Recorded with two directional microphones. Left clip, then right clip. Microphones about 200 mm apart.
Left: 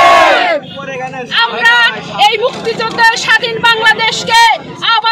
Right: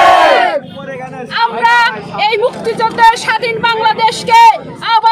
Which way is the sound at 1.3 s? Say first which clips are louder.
Left 1 dB; 25° right (ahead or behind).